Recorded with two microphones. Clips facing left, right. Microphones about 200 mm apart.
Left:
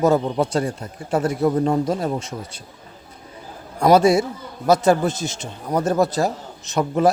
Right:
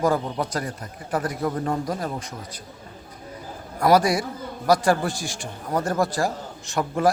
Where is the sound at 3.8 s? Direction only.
25° left (ahead or behind).